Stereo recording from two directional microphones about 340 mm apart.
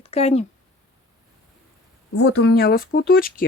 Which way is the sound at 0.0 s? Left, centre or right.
Centre.